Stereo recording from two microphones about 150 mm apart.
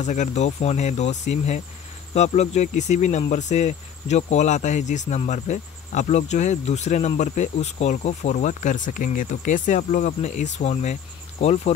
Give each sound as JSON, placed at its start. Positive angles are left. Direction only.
{"t": 0.0, "sound": "speech", "side_deg": 50}